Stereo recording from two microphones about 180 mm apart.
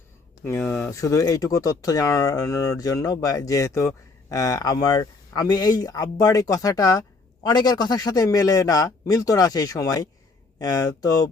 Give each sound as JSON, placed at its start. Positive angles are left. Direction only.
{"t": 0.4, "sound": "speech", "side_deg": 10}